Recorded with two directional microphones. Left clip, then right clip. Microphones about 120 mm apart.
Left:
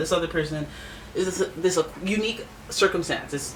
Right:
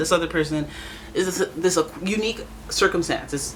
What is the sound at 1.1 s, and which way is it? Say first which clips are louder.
Speech: right 2 dB; 50° right (ahead or behind).